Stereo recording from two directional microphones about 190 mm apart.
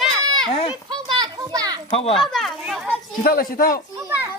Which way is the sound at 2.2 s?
Centre (ahead or behind).